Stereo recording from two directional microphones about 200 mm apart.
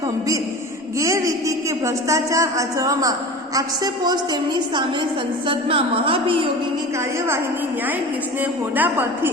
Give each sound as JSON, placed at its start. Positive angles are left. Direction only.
{"t": 0.9, "sound": "a woman's voice", "side_deg": -15}
{"t": 8.7, "sound": "a woman's voice", "side_deg": -10}